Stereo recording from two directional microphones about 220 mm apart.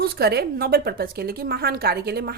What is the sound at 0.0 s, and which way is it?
A woman's voice, 45° right (ahead or behind).